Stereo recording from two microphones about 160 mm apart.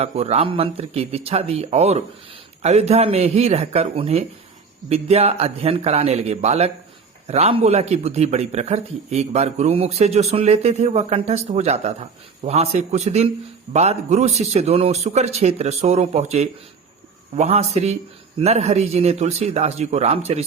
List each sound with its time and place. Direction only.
0.0 s a man's voice: 40° right (ahead or behind)